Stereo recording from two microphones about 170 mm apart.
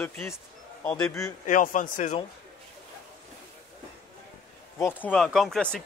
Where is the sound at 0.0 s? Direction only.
10° left (ahead or behind).